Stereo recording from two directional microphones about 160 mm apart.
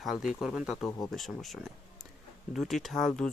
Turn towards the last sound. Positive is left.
turn(degrees=5)  # may be behind; listen again after turning